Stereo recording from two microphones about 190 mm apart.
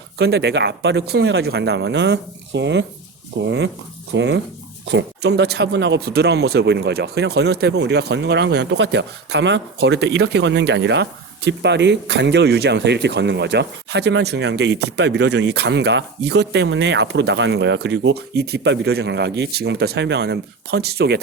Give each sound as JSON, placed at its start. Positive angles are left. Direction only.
{"t": 0.2, "sound": "speech", "side_deg": -60}